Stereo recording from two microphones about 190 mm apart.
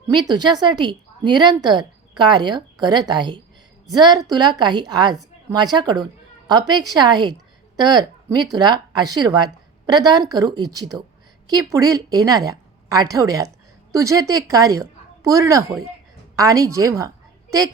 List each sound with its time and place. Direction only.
0.1 s a woman's voice: 20° right (ahead or behind)